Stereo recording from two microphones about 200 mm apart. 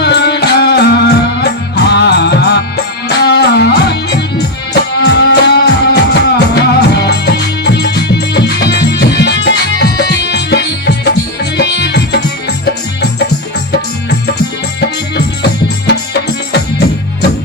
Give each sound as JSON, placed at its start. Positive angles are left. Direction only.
{"t": 0.0, "sound": "music", "side_deg": 55}
{"t": 14.8, "sound": "music", "side_deg": 55}